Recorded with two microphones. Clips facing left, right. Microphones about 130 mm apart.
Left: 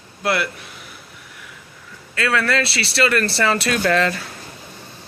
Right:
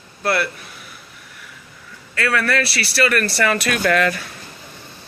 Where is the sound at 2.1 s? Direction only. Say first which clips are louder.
Even; 25° left (ahead or behind).